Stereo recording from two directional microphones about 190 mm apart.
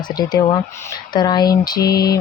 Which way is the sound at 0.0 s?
20° left (ahead or behind).